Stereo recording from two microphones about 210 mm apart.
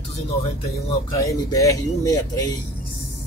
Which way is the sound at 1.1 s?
15° left (ahead or behind).